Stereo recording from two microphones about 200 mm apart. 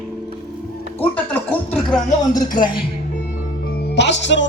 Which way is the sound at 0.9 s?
5° left (ahead or behind).